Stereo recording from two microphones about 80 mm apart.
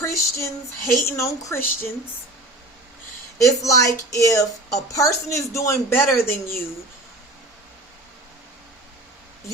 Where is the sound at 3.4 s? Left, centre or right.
Left.